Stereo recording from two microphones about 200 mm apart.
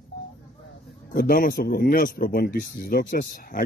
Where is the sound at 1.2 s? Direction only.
45° left (ahead or behind).